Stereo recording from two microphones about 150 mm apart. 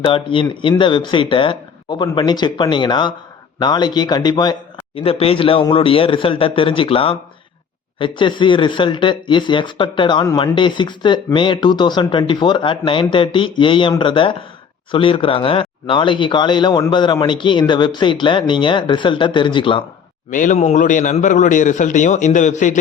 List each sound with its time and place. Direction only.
0.0 s speech: 35° left (ahead or behind)
4.9 s speech: 40° left (ahead or behind)
20.3 s a man's voice: 55° left (ahead or behind)